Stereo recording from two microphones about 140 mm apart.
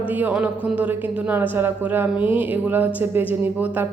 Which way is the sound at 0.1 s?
10° right (ahead or behind).